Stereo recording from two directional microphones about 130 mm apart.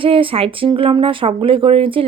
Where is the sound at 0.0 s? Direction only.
45° right (ahead or behind).